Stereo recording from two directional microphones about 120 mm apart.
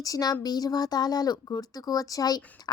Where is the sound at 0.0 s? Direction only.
30° left (ahead or behind).